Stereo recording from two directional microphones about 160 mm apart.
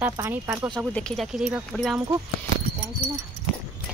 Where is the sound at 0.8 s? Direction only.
5° left (ahead or behind).